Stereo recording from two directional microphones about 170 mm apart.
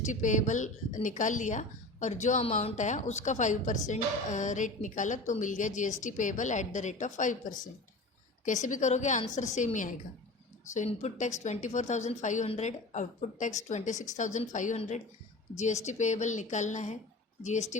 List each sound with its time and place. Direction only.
0.0 s a woman's voice: 45° left (ahead or behind)